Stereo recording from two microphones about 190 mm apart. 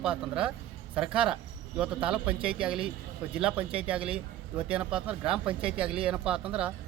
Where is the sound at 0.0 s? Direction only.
5° right (ahead or behind).